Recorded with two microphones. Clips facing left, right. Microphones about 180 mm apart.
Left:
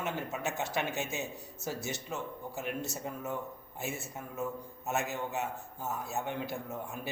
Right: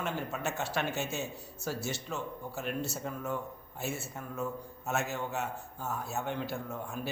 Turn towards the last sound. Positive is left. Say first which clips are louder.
# right 1 dB
turn(degrees=20)  # may be behind; listen again after turning